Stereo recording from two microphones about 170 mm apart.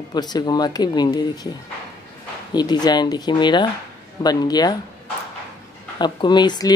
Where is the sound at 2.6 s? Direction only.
25° left (ahead or behind).